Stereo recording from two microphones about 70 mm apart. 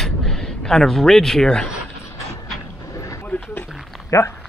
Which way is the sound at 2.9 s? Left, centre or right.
Left.